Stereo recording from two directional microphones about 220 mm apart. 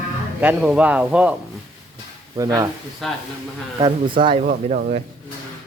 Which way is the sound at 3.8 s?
20° right (ahead or behind).